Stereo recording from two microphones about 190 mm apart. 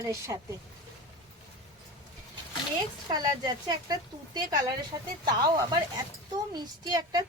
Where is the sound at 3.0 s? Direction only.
20° right (ahead or behind).